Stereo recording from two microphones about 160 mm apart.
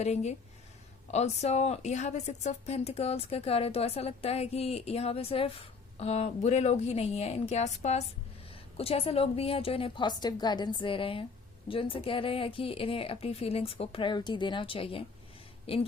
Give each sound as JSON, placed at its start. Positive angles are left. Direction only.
{"t": 0.0, "sound": "a woman's voice", "side_deg": 45}